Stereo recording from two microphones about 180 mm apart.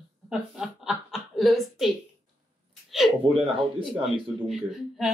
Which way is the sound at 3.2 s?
30° right (ahead or behind).